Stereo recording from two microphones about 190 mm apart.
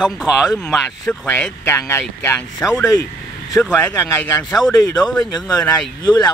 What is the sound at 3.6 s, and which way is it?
Speech, 5° left (ahead or behind).